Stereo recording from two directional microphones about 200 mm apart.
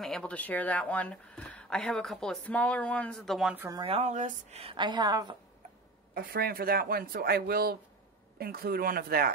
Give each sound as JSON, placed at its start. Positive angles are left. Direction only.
{"t": 0.0, "sound": "speech", "side_deg": 5}
{"t": 3.8, "sound": "a woman's voice", "side_deg": -30}
{"t": 6.1, "sound": "speech", "side_deg": -50}